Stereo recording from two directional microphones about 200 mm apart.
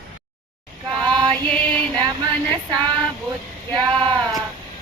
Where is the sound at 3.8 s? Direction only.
25° right (ahead or behind).